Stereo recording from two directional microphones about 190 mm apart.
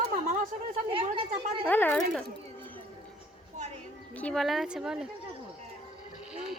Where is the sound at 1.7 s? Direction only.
10° left (ahead or behind).